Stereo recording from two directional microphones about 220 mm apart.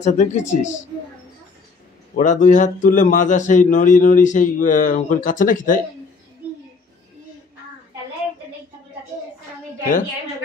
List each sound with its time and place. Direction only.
0.0 s a man's voice: 35° left (ahead or behind)
2.1 s a man's voice: 35° left (ahead or behind)